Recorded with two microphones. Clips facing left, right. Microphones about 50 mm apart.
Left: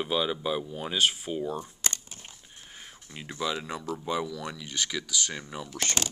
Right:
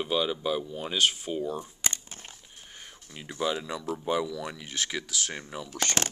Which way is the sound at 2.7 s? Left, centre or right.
Centre.